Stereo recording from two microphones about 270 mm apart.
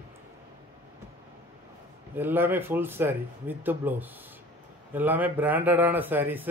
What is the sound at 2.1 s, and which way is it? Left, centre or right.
Speech, centre.